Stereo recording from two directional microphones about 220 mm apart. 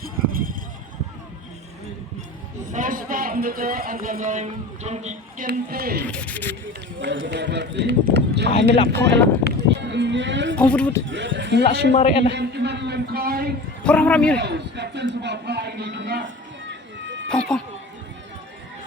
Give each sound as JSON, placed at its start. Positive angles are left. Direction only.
{"t": 0.0, "sound": "a sound", "side_deg": -40}
{"t": 2.7, "sound": "speech", "side_deg": -40}
{"t": 5.5, "sound": "speech", "side_deg": -45}
{"t": 6.0, "sound": "speech", "side_deg": 5}
{"t": 7.0, "sound": "speech", "side_deg": -55}
{"t": 8.5, "sound": "speech", "side_deg": 25}
{"t": 9.6, "sound": "speech", "side_deg": -50}
{"t": 10.6, "sound": "a man's voice", "side_deg": 5}
{"t": 11.1, "sound": "speech", "side_deg": -55}
{"t": 11.9, "sound": "a man's voice", "side_deg": 30}
{"t": 12.3, "sound": "speech", "side_deg": -50}
{"t": 13.8, "sound": "a man's voice", "side_deg": 5}
{"t": 14.3, "sound": "speech", "side_deg": -50}
{"t": 17.2, "sound": "speech", "side_deg": 5}